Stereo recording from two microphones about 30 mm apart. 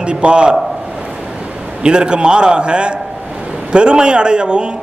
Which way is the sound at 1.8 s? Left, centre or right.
Right.